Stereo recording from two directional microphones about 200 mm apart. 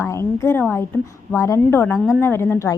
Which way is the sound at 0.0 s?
15° left (ahead or behind).